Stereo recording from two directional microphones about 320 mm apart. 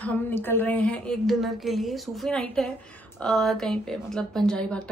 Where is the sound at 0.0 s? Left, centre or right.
Centre.